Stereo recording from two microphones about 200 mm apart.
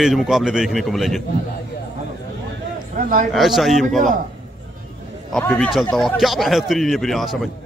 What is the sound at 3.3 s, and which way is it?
Speech, centre (ahead or behind).